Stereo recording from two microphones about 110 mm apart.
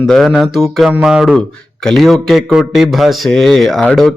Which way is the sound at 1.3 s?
5° left (ahead or behind).